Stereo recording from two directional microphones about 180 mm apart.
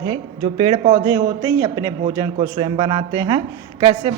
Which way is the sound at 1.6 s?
20° right (ahead or behind).